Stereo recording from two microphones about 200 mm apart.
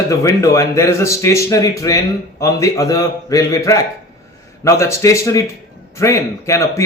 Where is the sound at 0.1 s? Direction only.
15° left (ahead or behind).